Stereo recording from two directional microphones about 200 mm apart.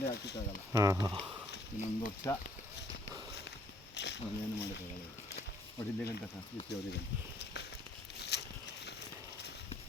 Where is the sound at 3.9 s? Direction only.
60° left (ahead or behind).